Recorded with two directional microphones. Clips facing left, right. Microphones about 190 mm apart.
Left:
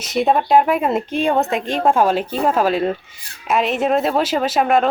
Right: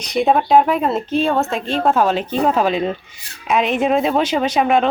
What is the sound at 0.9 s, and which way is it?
A woman's voice, 15° left (ahead or behind).